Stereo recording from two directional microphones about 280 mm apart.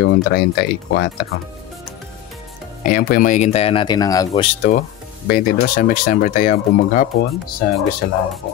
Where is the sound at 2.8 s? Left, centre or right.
Left; by 4.4 s centre.